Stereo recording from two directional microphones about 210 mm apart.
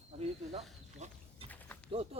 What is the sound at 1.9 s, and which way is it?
Speech, 30° right (ahead or behind).